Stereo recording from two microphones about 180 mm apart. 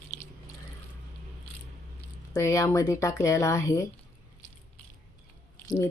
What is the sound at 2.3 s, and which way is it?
Speech, 15° left (ahead or behind).